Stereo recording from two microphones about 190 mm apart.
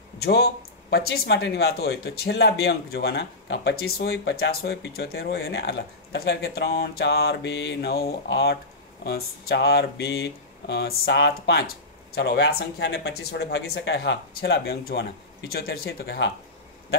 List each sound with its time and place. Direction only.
0.2 s speech: 60° left (ahead or behind)